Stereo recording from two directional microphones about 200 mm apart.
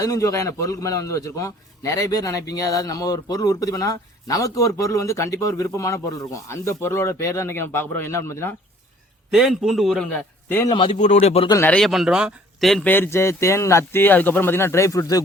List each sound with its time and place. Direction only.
0.0 s speech: 15° left (ahead or behind)
9.3 s a man's voice: centre (ahead or behind); by 10.9 s 20° left (ahead or behind)
10.9 s speech: 35° left (ahead or behind)
11.5 s speech: 10° left (ahead or behind)